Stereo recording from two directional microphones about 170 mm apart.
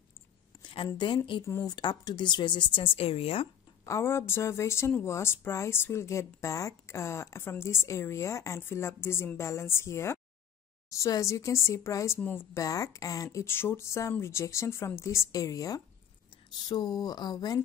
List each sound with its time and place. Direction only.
0.6 s a woman's voice: 30° left (ahead or behind)
1.4 s speech: 20° left (ahead or behind); by 3.4 s 35° left (ahead or behind)
3.8 s a woman's voice: 15° left (ahead or behind)